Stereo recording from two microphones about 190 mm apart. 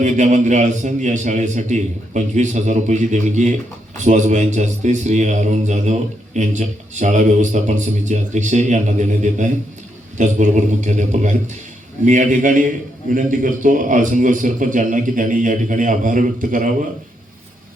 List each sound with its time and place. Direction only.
0.0 s a man's voice: 40° right (ahead or behind)